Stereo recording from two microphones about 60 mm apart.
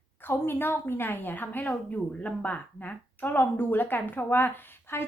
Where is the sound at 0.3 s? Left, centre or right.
Left.